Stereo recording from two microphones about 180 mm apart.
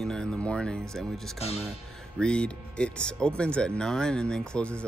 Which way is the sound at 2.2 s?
5° left (ahead or behind).